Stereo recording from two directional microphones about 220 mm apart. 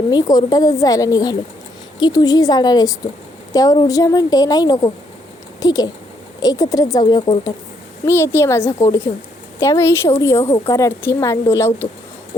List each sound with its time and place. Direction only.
0.1 s a woman's voice: 15° left (ahead or behind)